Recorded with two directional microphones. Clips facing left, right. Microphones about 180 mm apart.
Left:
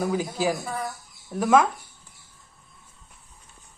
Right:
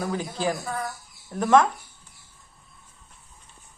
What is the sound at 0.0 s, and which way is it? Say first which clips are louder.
Speech: left 2 dB; 10° left (ahead or behind).